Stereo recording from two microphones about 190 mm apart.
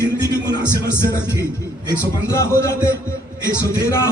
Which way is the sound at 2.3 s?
15° left (ahead or behind).